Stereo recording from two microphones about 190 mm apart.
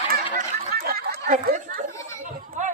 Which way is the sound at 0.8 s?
50° right (ahead or behind).